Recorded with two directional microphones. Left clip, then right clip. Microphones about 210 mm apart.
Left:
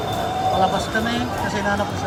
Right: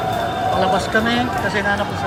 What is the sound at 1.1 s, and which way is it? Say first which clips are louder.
Speech: right 4 dB; 15° left (ahead or behind).